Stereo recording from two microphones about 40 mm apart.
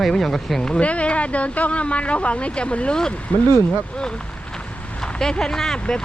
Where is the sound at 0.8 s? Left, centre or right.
Left.